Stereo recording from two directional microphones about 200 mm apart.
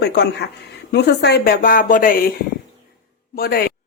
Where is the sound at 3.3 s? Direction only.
50° left (ahead or behind).